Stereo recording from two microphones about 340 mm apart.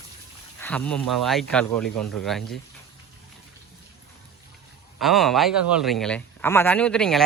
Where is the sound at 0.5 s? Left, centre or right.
Centre.